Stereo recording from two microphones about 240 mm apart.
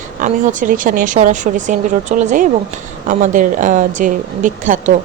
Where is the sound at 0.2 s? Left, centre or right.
Right.